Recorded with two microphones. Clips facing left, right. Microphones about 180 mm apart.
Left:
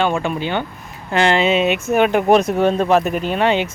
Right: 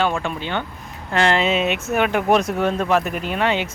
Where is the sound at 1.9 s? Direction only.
25° left (ahead or behind).